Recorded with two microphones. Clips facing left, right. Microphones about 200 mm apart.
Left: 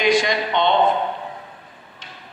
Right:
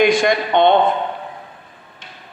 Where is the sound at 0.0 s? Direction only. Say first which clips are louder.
Right 4 dB; 55° right (ahead or behind).